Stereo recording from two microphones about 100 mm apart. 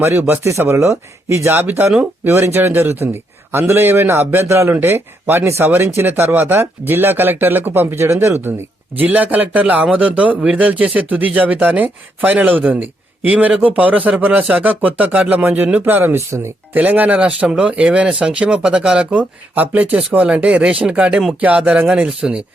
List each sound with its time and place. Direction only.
0.2 s a man's voice: 25° right (ahead or behind)
9.0 s a man's voice: 15° right (ahead or behind)
16.7 s a man's voice: 15° right (ahead or behind)